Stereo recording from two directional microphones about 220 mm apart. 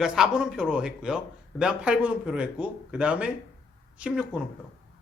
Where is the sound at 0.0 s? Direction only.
5° right (ahead or behind).